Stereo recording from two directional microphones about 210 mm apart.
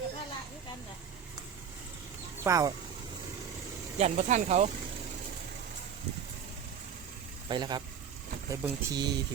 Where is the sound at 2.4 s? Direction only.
15° right (ahead or behind).